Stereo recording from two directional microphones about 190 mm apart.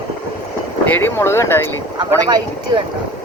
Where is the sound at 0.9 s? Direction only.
10° left (ahead or behind).